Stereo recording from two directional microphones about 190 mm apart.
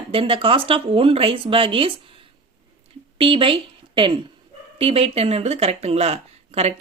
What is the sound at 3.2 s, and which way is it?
A woman's voice, 30° right (ahead or behind).